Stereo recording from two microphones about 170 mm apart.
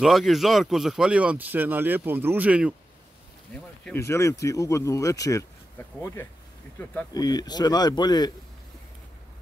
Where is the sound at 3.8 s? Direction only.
10° left (ahead or behind).